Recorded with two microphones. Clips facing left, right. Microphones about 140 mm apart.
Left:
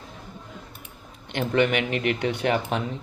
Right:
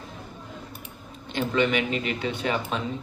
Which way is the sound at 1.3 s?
60° left (ahead or behind).